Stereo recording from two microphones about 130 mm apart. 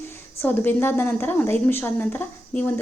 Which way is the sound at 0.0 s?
15° left (ahead or behind).